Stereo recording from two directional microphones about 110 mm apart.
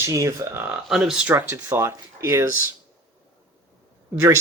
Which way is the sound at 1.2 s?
20° right (ahead or behind).